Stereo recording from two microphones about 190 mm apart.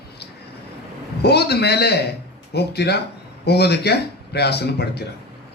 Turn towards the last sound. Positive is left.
turn(degrees=60)  # may be behind; listen again after turning